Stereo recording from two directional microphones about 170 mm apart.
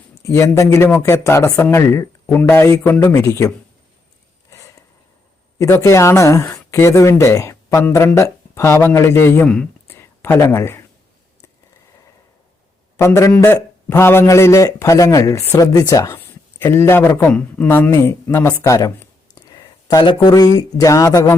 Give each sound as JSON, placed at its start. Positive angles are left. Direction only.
{"t": 0.1, "sound": "speech", "side_deg": 20}
{"t": 4.5, "sound": "a sound", "side_deg": 15}
{"t": 5.5, "sound": "speech", "side_deg": 15}
{"t": 13.0, "sound": "speech", "side_deg": 15}
{"t": 19.3, "sound": "a sound", "side_deg": 25}
{"t": 20.6, "sound": "speech", "side_deg": 20}